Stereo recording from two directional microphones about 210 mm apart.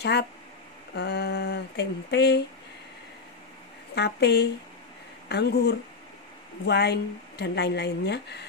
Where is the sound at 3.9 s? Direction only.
50° left (ahead or behind).